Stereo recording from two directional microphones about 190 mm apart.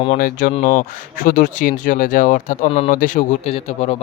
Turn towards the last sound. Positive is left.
turn(degrees=30)  # may be behind; listen again after turning